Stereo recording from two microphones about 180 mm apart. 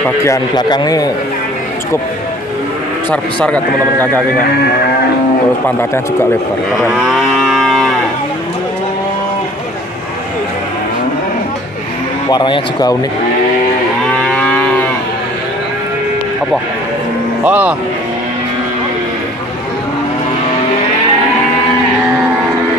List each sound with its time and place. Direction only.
0.0 s a man's voice: 15° left (ahead or behind)
3.1 s speech: 5° left (ahead or behind)
6.8 s livestock: 5° right (ahead or behind)
12.3 s a man's voice: 25° left (ahead or behind)
14.2 s livestock: 5° left (ahead or behind)
17.5 s speech: 10° right (ahead or behind)